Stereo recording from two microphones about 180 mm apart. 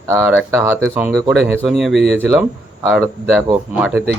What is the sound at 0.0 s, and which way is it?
Speech, 15° right (ahead or behind).